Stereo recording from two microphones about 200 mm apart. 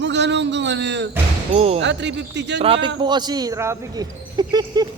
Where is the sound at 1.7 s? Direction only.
60° right (ahead or behind).